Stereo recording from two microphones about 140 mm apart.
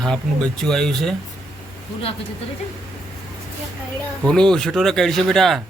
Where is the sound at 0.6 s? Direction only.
5° left (ahead or behind).